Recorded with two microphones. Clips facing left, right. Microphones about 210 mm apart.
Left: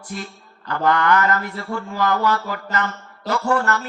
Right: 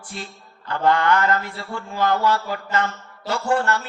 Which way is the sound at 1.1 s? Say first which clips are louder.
Left 1 dB; 50° left (ahead or behind).